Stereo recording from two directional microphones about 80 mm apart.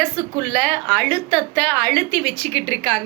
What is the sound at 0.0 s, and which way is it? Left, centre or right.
A woman's voice, centre.